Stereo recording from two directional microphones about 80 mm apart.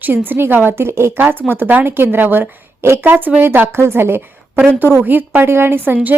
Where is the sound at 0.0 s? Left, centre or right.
Right.